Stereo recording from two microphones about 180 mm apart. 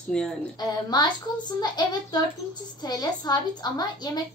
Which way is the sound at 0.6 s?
25° left (ahead or behind).